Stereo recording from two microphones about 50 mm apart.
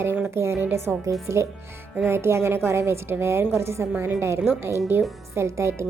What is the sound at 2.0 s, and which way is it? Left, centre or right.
A woman's voice, right.